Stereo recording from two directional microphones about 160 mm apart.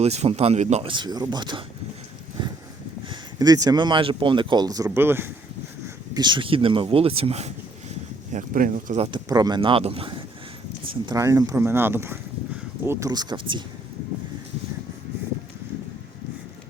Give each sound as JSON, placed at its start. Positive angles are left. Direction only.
{"t": 0.0, "sound": "speech", "side_deg": -40}
{"t": 0.9, "sound": "speech", "side_deg": -30}
{"t": 2.4, "sound": "a sound", "side_deg": -30}
{"t": 3.1, "sound": "speech", "side_deg": -25}
{"t": 6.1, "sound": "speech", "side_deg": -30}
{"t": 8.3, "sound": "speech", "side_deg": -55}
{"t": 9.0, "sound": "speech", "side_deg": -30}
{"t": 11.0, "sound": "speech", "side_deg": -20}